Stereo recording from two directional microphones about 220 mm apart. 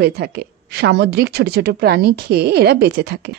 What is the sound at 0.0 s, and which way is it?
A woman's voice, 45° right (ahead or behind).